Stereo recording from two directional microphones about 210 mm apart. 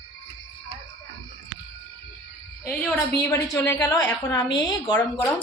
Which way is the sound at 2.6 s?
10° left (ahead or behind).